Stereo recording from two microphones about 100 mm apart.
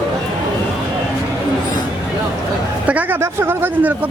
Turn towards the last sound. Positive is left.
turn(degrees=-15)  # may be behind; listen again after turning